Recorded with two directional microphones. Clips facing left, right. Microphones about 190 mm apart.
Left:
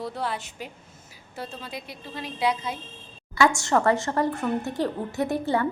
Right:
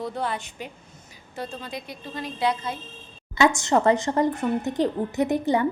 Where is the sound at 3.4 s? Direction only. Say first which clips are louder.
Right 1 dB; 20° right (ahead or behind).